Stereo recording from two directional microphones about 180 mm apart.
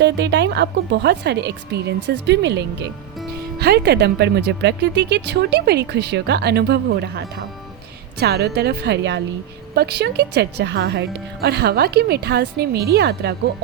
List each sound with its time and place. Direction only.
0.0 s speech: 75° right (ahead or behind)